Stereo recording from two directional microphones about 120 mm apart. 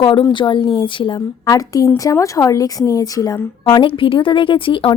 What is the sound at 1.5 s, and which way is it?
A woman's voice, 30° left (ahead or behind).